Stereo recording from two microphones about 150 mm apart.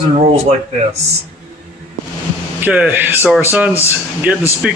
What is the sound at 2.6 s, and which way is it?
Speech, 10° right (ahead or behind).